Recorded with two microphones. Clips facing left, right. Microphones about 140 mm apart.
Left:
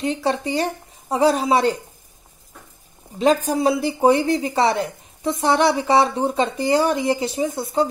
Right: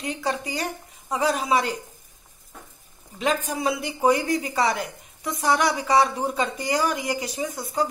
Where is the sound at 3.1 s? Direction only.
35° left (ahead or behind).